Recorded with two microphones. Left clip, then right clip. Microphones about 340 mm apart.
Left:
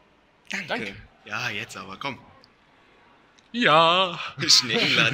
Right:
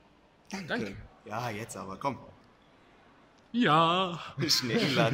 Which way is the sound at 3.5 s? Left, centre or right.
Centre.